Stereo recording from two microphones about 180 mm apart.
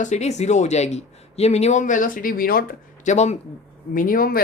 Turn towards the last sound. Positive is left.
turn(degrees=55)  # may be behind; listen again after turning